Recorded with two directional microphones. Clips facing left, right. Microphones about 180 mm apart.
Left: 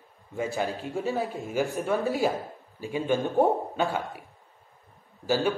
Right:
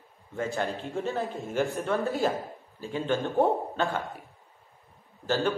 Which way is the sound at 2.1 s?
15° left (ahead or behind).